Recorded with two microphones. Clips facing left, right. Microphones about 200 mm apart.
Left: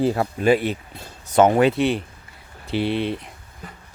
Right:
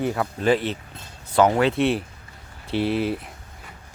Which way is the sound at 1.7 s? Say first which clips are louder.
Even; centre (ahead or behind).